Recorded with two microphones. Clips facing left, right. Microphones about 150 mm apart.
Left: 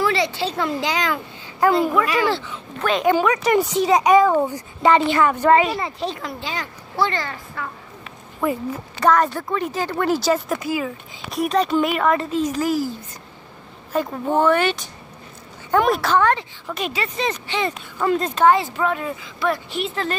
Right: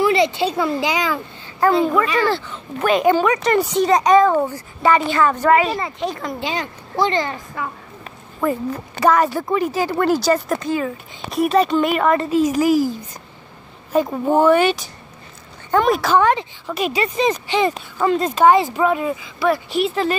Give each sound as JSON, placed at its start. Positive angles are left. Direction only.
{"t": 0.0, "sound": "a sound", "side_deg": -20}
{"t": 0.7, "sound": "speech", "side_deg": -10}
{"t": 1.1, "sound": "a child's voice", "side_deg": 0}
{"t": 5.9, "sound": "speech", "side_deg": 30}
{"t": 6.4, "sound": "a woman's voice", "side_deg": -20}
{"t": 8.4, "sound": "speech", "side_deg": 5}
{"t": 9.0, "sound": "speech", "side_deg": -5}
{"t": 13.9, "sound": "speech", "side_deg": -10}
{"t": 15.7, "sound": "speech", "side_deg": 0}
{"t": 16.2, "sound": "speech", "side_deg": -15}
{"t": 17.9, "sound": "speech", "side_deg": 0}
{"t": 18.3, "sound": "speech", "side_deg": -15}